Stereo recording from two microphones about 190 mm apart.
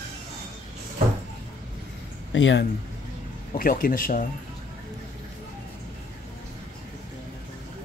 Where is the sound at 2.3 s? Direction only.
75° left (ahead or behind).